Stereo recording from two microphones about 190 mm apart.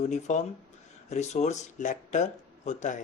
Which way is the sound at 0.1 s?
40° left (ahead or behind).